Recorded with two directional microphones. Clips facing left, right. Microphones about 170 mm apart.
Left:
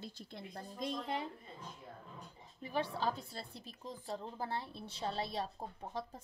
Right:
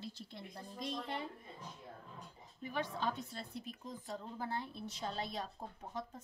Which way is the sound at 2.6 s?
30° left (ahead or behind).